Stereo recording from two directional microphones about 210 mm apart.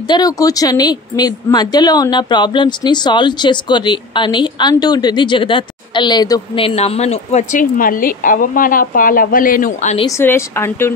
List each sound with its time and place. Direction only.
0.1 s a woman's voice: 15° left (ahead or behind); by 10.0 s 35° left (ahead or behind)
10.0 s speech: 10° left (ahead or behind)